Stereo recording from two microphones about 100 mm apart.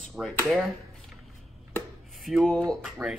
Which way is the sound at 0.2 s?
5° right (ahead or behind).